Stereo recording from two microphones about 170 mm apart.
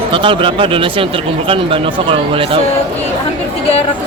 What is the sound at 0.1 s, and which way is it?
Speech, 30° right (ahead or behind).